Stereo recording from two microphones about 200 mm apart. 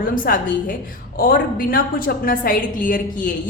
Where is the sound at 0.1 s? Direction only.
45° left (ahead or behind).